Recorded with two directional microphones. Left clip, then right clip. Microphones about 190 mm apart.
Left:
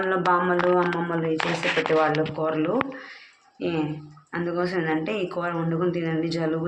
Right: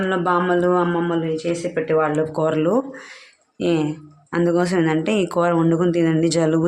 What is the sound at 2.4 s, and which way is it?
Speech, 80° right.